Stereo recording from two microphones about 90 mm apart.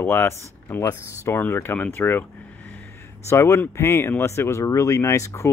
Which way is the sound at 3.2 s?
30° left (ahead or behind).